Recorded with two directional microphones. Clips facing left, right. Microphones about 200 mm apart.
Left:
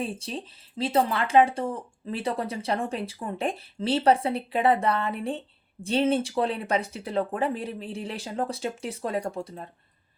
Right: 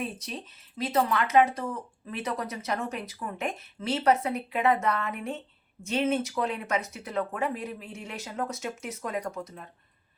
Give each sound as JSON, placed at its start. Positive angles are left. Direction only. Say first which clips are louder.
{"t": 0.0, "sound": "speech", "louder": "left 3 dB", "side_deg": 30}